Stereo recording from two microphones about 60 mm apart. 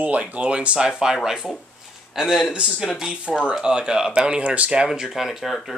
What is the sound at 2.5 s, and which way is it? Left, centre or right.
Speech, centre.